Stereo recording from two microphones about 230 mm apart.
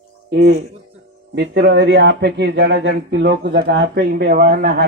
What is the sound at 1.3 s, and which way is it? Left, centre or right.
Speech, right.